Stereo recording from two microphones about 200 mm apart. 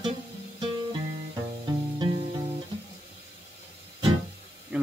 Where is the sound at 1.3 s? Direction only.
20° right (ahead or behind).